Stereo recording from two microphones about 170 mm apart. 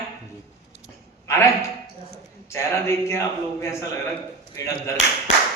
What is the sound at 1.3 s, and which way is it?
A man's voice, 15° left (ahead or behind).